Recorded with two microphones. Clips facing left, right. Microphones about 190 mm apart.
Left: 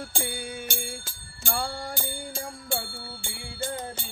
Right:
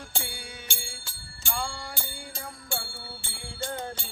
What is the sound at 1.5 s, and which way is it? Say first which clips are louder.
Music: left 3 dB; 45° left (ahead or behind).